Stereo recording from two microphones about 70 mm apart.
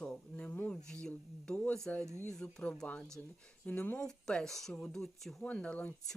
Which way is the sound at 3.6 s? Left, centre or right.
Left.